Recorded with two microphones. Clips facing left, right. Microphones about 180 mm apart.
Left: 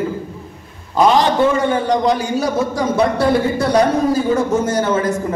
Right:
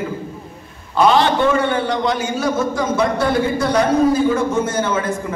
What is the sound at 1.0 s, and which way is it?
Speech, 15° left (ahead or behind).